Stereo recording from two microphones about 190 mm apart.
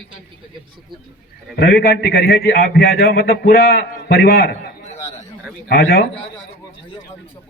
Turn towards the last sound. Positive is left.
turn(degrees=55)  # may be behind; listen again after turning